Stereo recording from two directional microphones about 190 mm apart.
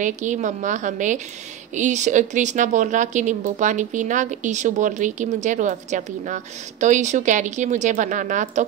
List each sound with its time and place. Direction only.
0.0 s speech: 40° right (ahead or behind)